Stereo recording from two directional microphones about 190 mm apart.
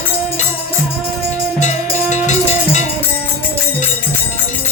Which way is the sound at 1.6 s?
40° left (ahead or behind).